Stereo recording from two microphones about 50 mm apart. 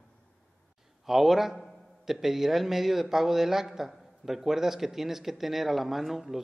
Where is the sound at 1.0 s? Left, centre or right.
Centre.